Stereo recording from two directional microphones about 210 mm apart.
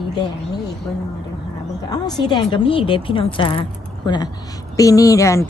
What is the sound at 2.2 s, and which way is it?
A woman's voice, 20° left (ahead or behind).